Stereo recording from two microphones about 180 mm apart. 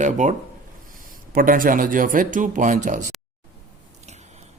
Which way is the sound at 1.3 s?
50° right (ahead or behind).